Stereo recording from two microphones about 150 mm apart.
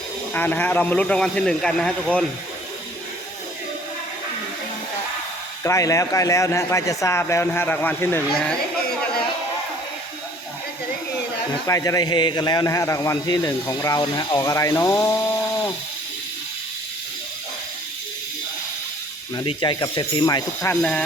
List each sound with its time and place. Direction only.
0.3 s speech: 10° left (ahead or behind)
5.6 s a man's voice: 20° left (ahead or behind)
11.6 s a man's voice: 20° left (ahead or behind)
19.5 s a man's voice: 30° left (ahead or behind)